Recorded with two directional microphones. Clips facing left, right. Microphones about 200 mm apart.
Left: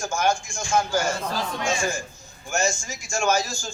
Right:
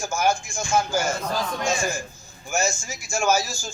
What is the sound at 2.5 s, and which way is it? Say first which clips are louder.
A man's voice: even; 5° right (ahead or behind).